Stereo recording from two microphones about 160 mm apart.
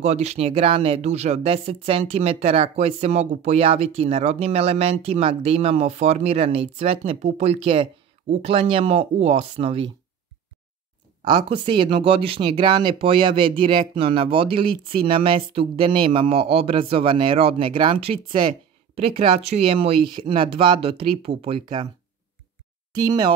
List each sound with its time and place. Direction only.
0.0 s speech: 45° right (ahead or behind)
11.2 s speech: 30° right (ahead or behind)
22.9 s speech: 25° right (ahead or behind)